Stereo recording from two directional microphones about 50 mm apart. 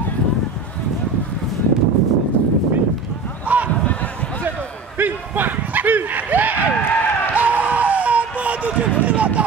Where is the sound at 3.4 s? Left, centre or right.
Right.